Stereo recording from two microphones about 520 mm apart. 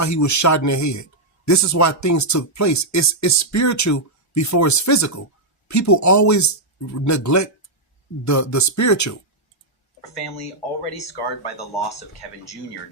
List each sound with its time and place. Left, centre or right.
0.0 s speech: left
10.0 s speech: left